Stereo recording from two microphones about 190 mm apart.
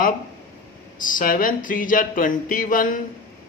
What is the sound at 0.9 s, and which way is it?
Speech, 45° left (ahead or behind).